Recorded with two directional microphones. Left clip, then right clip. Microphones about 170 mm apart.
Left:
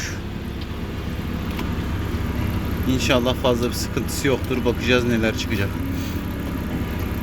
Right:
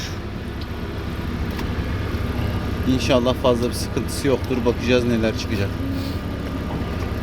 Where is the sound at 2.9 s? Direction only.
Centre (ahead or behind).